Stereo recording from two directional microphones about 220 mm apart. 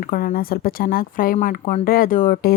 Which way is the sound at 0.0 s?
40° left (ahead or behind).